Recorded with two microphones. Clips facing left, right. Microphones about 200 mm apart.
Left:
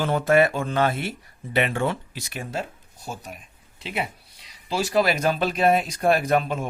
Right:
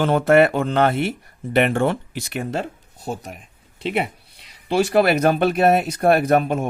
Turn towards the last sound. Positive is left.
turn(degrees=-50)  # may be behind; listen again after turning